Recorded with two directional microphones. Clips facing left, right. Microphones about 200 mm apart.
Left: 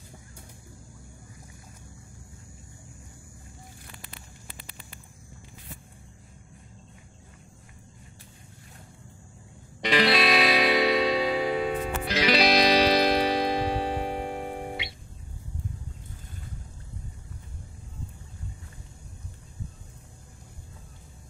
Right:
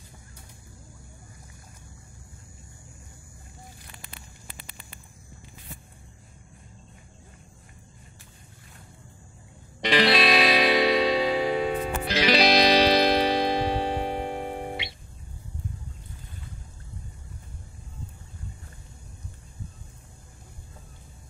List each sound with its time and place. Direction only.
9.9 s music: 30° right (ahead or behind)